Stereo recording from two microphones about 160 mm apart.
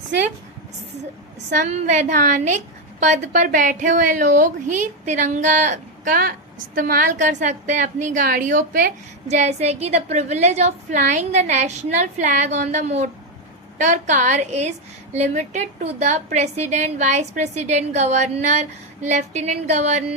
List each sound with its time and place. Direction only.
1.5 s a woman's voice: 50° right (ahead or behind)